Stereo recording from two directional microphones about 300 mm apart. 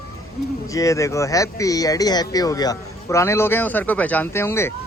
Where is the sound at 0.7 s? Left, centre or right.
Centre.